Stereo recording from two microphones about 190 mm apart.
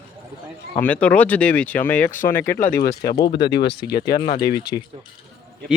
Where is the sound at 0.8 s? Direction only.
5° left (ahead or behind).